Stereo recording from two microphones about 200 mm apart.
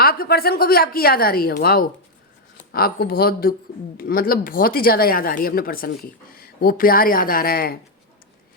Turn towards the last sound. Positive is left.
turn(degrees=50)  # may be behind; listen again after turning